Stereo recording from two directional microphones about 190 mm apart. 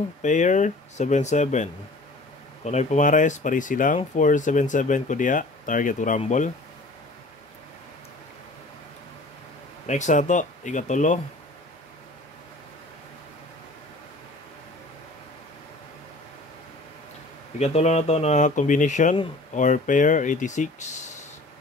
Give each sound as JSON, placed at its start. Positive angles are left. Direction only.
{"t": 0.2, "sound": "speech", "side_deg": 40}
{"t": 9.8, "sound": "speech", "side_deg": 40}
{"t": 17.6, "sound": "speech", "side_deg": 35}